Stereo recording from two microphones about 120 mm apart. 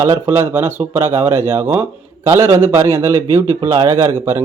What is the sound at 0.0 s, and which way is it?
Speech, 20° right (ahead or behind).